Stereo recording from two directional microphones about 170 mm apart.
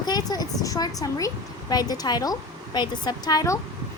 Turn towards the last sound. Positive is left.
turn(degrees=20)  # may be behind; listen again after turning